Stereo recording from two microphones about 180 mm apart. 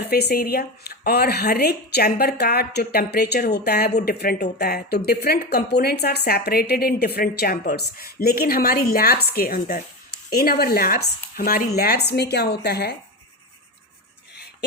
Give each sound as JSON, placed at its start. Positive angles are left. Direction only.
{"t": 0.0, "sound": "speech", "side_deg": 65}